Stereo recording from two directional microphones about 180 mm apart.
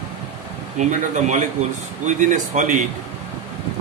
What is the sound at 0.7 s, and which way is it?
Speech, 45° right (ahead or behind).